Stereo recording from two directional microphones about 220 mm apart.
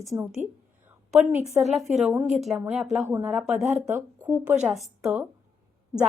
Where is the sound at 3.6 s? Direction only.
30° right (ahead or behind).